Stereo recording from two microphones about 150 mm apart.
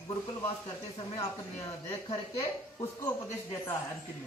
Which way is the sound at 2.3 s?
20° left (ahead or behind).